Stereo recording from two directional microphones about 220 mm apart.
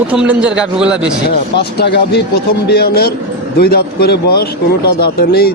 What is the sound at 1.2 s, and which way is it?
Speech, 50° left (ahead or behind).